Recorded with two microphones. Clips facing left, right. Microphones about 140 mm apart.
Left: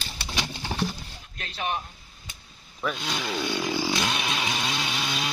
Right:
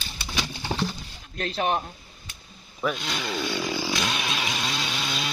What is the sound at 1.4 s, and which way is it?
Speech, 50° right (ahead or behind).